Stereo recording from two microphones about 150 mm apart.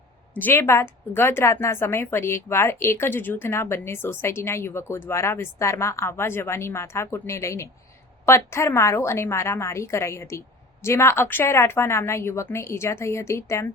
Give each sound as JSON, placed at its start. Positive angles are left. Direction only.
{"t": 0.3, "sound": "a woman's voice", "side_deg": 15}